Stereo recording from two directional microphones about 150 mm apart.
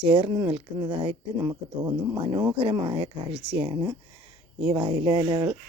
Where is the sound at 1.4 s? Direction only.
25° right (ahead or behind).